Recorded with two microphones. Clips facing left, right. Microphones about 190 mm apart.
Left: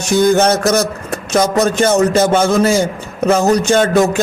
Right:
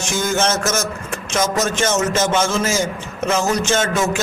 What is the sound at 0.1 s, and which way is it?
Speech, 35° left (ahead or behind).